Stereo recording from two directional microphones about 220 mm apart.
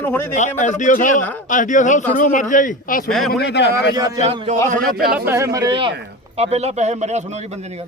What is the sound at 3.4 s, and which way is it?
Speech, 50° left (ahead or behind).